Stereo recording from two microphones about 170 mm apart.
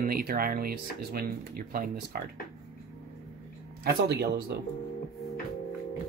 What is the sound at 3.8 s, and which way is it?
Speech, 70° right (ahead or behind).